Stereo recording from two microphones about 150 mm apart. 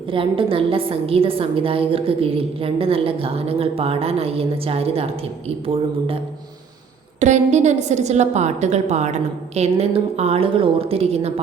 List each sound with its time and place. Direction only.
0.1 s a woman's voice: 35° right (ahead or behind)
7.2 s a woman's voice: 50° right (ahead or behind)